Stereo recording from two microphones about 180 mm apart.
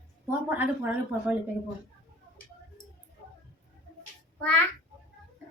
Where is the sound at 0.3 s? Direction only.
10° right (ahead or behind).